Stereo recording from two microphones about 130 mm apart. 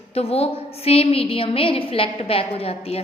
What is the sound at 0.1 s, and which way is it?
A woman's voice, 50° left (ahead or behind).